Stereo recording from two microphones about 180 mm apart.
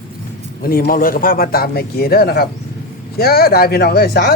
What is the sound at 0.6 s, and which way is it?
Speech, 55° left (ahead or behind).